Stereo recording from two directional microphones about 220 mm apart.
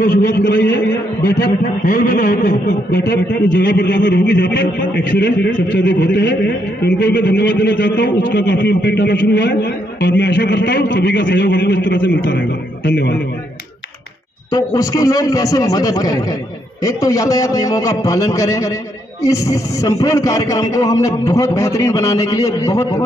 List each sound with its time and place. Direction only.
0.0 s a man's voice: 40° left (ahead or behind)
0.4 s a man's voice: 55° left (ahead or behind); by 2.8 s 35° left (ahead or behind)
2.9 s a man's voice: 55° left (ahead or behind)
14.5 s a man's voice: 15° left (ahead or behind)